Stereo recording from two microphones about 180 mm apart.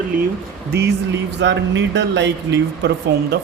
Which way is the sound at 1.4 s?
80° right.